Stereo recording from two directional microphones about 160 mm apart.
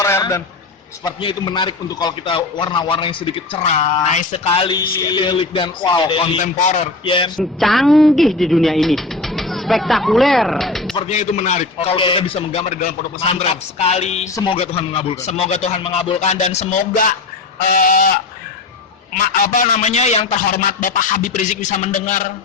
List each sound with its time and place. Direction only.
0.0 s a sound: 20° left (ahead or behind)
1.0 s a man's voice: 30° left (ahead or behind)
6.4 s speech: 50° left (ahead or behind)
7.0 s a man's voice: 30° left (ahead or behind)
7.3 s speech: centre (ahead or behind)
11.1 s speech: 45° left (ahead or behind)
11.9 s a man's voice: 35° left (ahead or behind)
14.3 s speech: 30° left (ahead or behind); by 17.0 s 45° left (ahead or behind)
17.7 s goose: 60° left (ahead or behind)
19.1 s speech: 50° left (ahead or behind)